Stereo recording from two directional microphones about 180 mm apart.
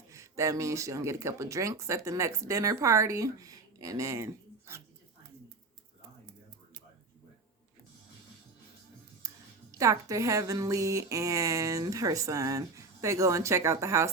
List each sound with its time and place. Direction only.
0.1 s a woman's voice: 15° right (ahead or behind)
9.2 s music: 20° right (ahead or behind)
9.7 s a woman's voice: 20° right (ahead or behind)